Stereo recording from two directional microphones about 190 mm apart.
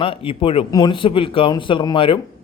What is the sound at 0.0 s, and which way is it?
Speech, 30° left (ahead or behind).